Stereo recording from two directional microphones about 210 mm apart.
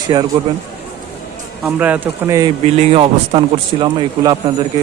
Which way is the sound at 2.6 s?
30° right (ahead or behind).